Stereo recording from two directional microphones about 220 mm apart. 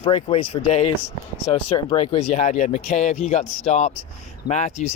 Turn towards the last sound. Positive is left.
turn(degrees=30)  # may be behind; listen again after turning